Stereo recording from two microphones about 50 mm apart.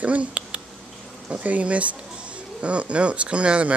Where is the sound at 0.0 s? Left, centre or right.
Right.